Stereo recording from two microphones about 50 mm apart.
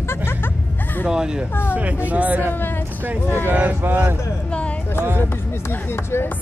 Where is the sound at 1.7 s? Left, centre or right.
Right.